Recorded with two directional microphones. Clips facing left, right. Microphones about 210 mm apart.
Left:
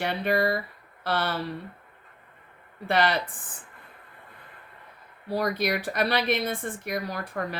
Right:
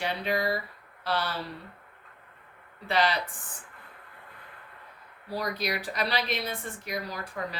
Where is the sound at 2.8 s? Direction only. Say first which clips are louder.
Left 2 dB; 55° left (ahead or behind).